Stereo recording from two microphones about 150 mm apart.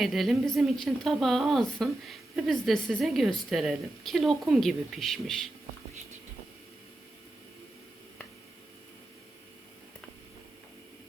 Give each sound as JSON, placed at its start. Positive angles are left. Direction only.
{"t": 0.0, "sound": "a woman's voice", "side_deg": 0}